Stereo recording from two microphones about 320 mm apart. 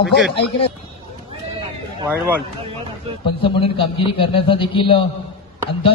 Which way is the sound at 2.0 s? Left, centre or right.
Centre.